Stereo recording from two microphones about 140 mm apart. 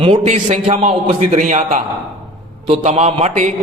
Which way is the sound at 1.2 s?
60° right (ahead or behind).